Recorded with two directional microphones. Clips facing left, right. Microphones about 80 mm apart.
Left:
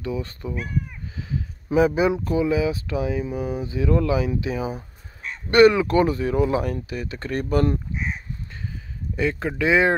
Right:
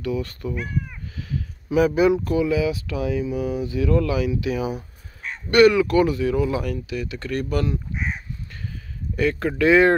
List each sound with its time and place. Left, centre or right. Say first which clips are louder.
0.0 s speech: right 2 dB; left
9.1 s speech: right 2 dB; centre